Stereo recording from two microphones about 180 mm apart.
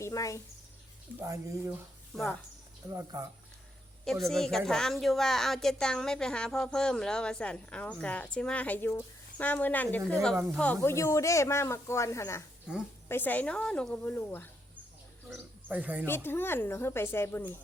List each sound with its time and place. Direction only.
0.0 s speech: 20° left (ahead or behind)
1.2 s speech: 15° right (ahead or behind)
2.1 s a woman's voice: centre (ahead or behind)
2.9 s speech: 20° right (ahead or behind)
4.0 s a woman's voice: centre (ahead or behind)
12.7 s a woman's voice: 5° right (ahead or behind)
13.1 s speech: 10° left (ahead or behind)
15.3 s a man's voice: 10° right (ahead or behind)
16.0 s speech: 10° left (ahead or behind)